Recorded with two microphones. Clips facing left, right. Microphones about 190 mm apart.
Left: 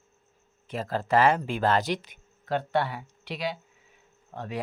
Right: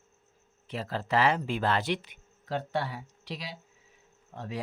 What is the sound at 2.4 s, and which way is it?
Speech, 65° left (ahead or behind).